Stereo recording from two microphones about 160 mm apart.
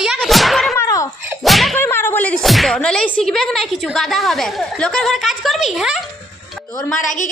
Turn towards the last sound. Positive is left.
turn(degrees=50)  # may be behind; listen again after turning